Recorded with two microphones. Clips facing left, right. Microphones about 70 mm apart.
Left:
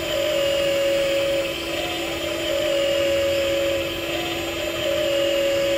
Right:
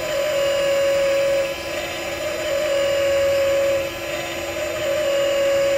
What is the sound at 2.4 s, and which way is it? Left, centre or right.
Vehicle, centre.